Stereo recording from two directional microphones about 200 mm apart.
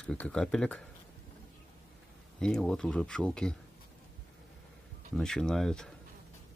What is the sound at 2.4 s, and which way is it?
Speech, 5° left (ahead or behind).